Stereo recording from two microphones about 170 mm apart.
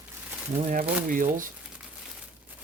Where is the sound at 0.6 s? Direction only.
50° right (ahead or behind).